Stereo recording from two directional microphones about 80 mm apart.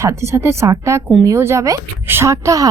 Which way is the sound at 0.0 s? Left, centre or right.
Right.